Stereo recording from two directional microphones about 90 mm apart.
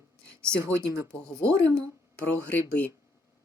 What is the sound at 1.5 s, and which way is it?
Speech, 30° right (ahead or behind).